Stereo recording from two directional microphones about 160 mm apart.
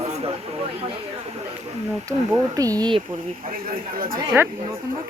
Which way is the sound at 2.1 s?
25° right (ahead or behind).